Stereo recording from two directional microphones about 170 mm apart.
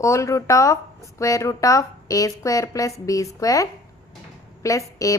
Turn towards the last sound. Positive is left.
turn(degrees=20)  # may be behind; listen again after turning